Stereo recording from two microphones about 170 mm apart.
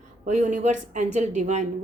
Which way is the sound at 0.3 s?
45° right (ahead or behind).